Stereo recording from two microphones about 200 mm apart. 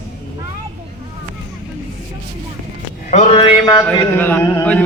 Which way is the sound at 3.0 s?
30° left (ahead or behind).